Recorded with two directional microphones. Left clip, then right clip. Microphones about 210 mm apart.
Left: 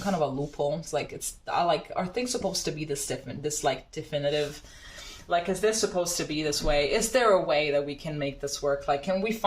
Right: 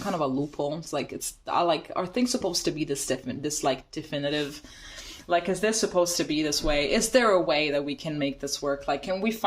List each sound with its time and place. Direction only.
0.2 s speech: 50° right (ahead or behind)